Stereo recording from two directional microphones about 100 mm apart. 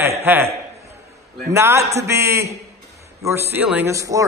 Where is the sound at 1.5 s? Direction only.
30° right (ahead or behind).